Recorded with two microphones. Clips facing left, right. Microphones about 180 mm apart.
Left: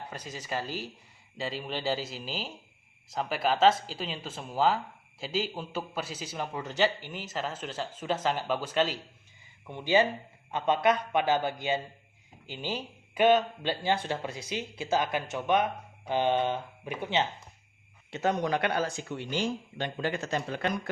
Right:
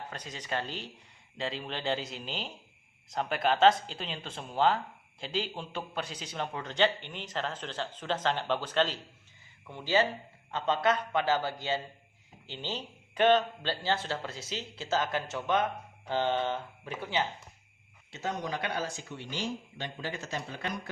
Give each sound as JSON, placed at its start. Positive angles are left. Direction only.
{"t": 0.1, "sound": "speech", "side_deg": 10}
{"t": 18.1, "sound": "speech", "side_deg": 65}